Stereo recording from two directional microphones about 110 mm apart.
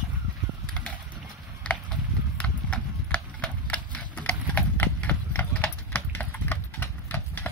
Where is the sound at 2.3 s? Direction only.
10° left (ahead or behind).